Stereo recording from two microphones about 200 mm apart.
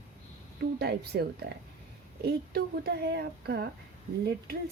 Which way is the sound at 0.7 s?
50° right (ahead or behind).